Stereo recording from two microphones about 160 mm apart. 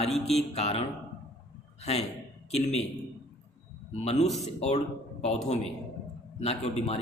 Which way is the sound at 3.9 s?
45° left (ahead or behind).